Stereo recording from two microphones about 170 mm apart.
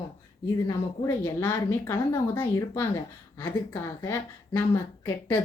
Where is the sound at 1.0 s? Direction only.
15° left (ahead or behind).